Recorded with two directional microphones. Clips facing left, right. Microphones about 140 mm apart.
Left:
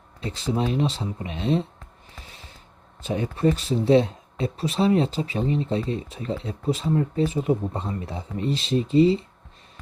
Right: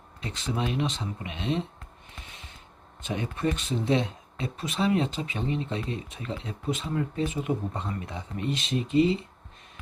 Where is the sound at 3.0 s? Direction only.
35° left (ahead or behind).